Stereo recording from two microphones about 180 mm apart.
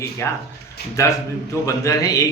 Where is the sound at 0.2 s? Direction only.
15° left (ahead or behind).